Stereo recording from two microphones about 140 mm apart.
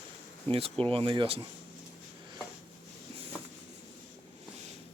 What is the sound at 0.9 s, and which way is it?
Speech, 35° right (ahead or behind).